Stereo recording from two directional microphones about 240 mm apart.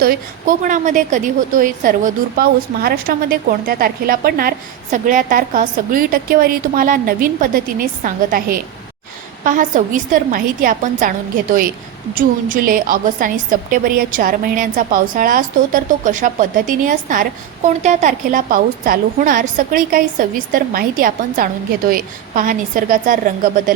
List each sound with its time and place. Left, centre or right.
0.0 s a woman's voice: right